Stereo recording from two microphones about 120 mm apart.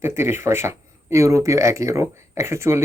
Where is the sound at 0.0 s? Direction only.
20° right (ahead or behind).